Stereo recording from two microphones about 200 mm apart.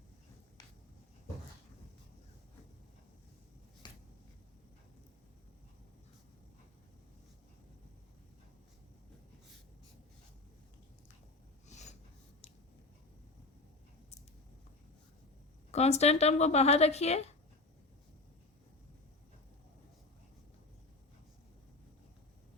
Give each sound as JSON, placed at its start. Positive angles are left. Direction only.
{"t": 3.8, "sound": "a sound", "side_deg": 20}
{"t": 11.7, "sound": "snort", "side_deg": 35}
{"t": 15.7, "sound": "speech", "side_deg": 35}